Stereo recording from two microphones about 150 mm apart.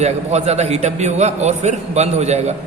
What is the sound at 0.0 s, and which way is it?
A man's voice, 45° right (ahead or behind).